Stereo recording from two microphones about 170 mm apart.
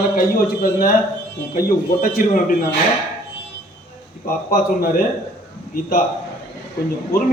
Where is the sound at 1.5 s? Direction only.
55° left (ahead or behind).